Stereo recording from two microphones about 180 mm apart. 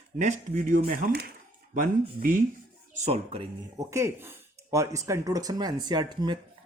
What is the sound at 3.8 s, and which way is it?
Speech, 15° right (ahead or behind).